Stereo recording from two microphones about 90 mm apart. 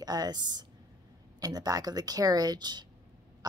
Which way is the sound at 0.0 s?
45° right (ahead or behind).